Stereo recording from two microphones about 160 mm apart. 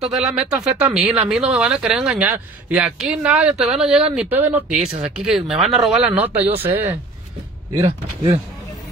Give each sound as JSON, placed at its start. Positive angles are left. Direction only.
{"t": 0.1, "sound": "speech", "side_deg": -5}
{"t": 7.7, "sound": "speech", "side_deg": -30}